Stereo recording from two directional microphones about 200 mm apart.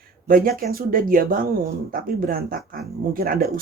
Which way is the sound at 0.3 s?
45° right (ahead or behind).